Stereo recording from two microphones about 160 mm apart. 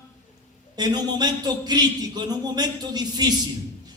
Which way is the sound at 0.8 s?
25° right (ahead or behind).